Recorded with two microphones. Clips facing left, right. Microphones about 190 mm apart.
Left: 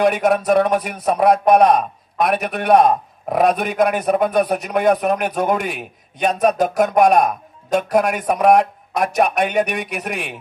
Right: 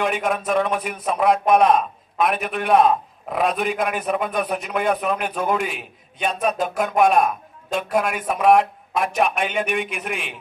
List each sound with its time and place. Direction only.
0.0 s a man's voice: 40° left (ahead or behind)